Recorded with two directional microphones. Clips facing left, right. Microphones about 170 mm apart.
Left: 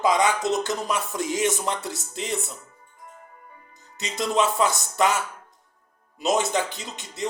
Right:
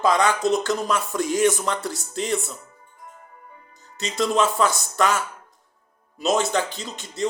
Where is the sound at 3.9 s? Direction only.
20° left (ahead or behind).